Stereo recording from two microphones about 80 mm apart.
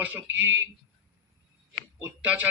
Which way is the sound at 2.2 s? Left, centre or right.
Centre.